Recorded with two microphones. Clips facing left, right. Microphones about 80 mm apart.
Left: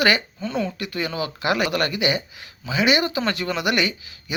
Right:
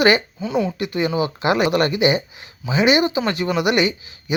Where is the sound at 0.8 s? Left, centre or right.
Right.